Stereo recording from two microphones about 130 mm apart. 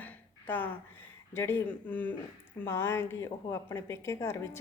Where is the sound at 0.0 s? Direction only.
15° left (ahead or behind).